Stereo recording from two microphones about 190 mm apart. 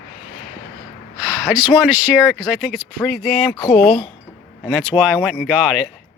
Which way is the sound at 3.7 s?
35° left (ahead or behind).